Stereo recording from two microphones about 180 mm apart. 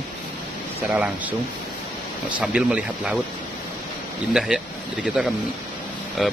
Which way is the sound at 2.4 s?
5° right (ahead or behind).